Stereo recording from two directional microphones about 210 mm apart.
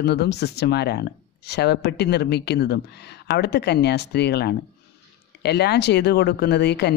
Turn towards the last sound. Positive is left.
turn(degrees=55)  # may be behind; listen again after turning